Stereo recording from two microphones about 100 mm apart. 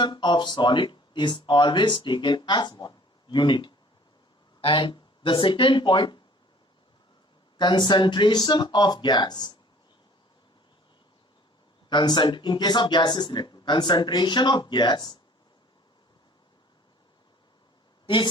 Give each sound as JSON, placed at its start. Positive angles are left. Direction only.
{"t": 0.0, "sound": "speech", "side_deg": 50}
{"t": 7.6, "sound": "speech", "side_deg": 50}
{"t": 11.9, "sound": "speech", "side_deg": 45}